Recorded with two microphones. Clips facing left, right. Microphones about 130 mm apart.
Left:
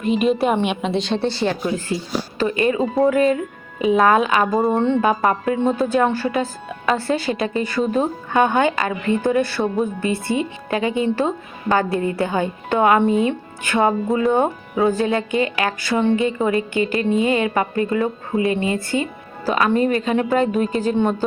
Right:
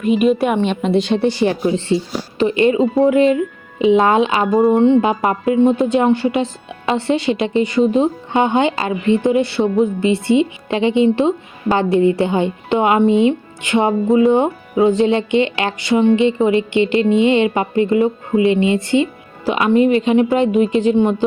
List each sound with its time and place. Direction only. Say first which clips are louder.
0.0 s a woman's voice: right 4 dB; 5° right (ahead or behind)
0.6 s a woman's voice: right 3 dB; 10° left (ahead or behind)
0.9 s a woman's voice: right 5 dB; 10° right (ahead or behind)